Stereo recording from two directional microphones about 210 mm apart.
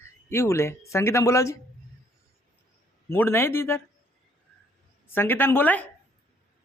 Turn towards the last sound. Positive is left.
turn(degrees=10)  # may be behind; listen again after turning